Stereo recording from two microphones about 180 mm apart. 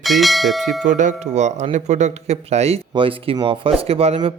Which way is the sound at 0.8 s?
45° right (ahead or behind).